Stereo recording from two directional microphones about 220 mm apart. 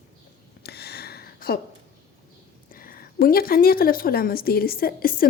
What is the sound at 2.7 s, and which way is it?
A woman's voice, 40° left (ahead or behind).